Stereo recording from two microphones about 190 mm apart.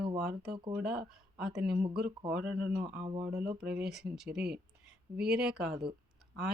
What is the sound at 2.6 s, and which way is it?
Speech, 50° right (ahead or behind).